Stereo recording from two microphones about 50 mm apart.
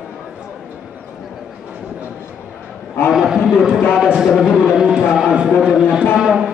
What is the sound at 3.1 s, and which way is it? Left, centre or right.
A man's voice, centre.